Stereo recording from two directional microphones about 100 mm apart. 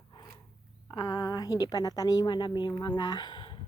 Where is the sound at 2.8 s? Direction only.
45° left (ahead or behind).